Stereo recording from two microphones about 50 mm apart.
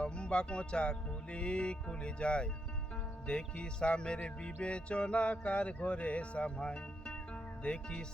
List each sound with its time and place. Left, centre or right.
0.0 s music: centre
7.6 s speech: centre